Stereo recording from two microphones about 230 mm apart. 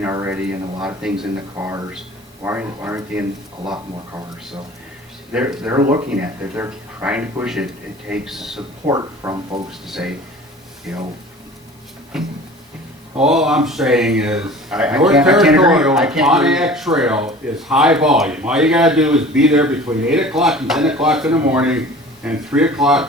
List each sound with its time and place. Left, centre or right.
0.0 s speech: centre
1.5 s speech: centre
5.3 s speech: centre
8.9 s speech: centre
9.8 s speech: centre
12.1 s speech: centre